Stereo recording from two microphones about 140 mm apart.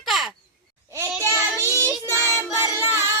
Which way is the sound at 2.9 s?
20° right (ahead or behind).